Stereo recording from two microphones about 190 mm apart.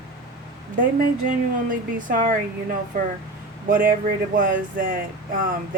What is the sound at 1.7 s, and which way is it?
Speech, 45° right (ahead or behind).